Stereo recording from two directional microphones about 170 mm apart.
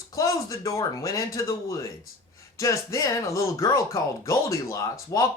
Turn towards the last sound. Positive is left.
turn(degrees=20)  # may be behind; listen again after turning